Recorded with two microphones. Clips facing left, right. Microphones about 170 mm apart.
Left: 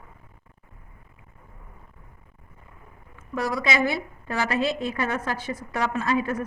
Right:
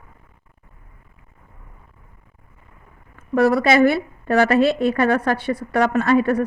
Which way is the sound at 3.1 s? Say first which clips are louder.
Right 11 dB; 60° right (ahead or behind).